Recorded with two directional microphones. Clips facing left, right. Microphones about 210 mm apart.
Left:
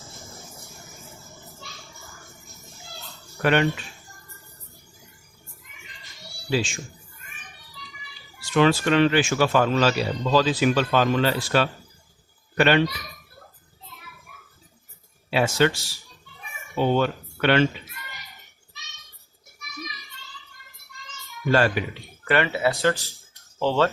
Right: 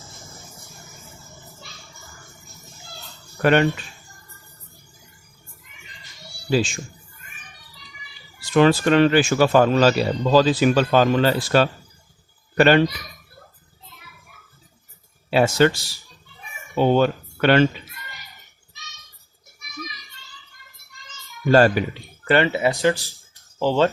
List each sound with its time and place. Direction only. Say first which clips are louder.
0.0 s a sound: left 1 dB; centre (ahead or behind)
3.4 s speech: right 4 dB; 40° right (ahead or behind)
8.5 s speech: right 3 dB; 40° right (ahead or behind)
15.3 s speech: right 4 dB; 40° right (ahead or behind)
16.7 s speech: right 4 dB; 40° right (ahead or behind)
21.5 s speech: right 6 dB; 40° right (ahead or behind)
22.2 s speech: right 3 dB; 25° right (ahead or behind)